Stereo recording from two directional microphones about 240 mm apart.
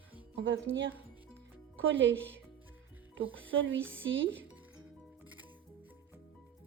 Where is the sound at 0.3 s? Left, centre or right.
Right.